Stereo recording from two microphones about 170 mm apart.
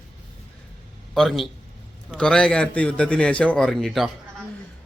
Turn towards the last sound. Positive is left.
turn(degrees=0)  # may be behind; listen again after turning